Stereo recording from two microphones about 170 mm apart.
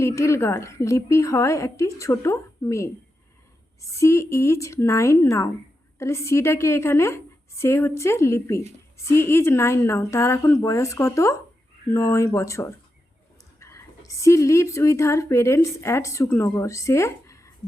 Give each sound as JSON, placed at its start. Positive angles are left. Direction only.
{"t": 0.0, "sound": "a woman's voice", "side_deg": 15}
{"t": 13.6, "sound": "whispering", "side_deg": 15}
{"t": 14.1, "sound": "a woman's voice", "side_deg": 20}